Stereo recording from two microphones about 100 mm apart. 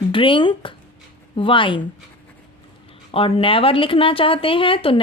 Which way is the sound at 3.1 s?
70° left (ahead or behind).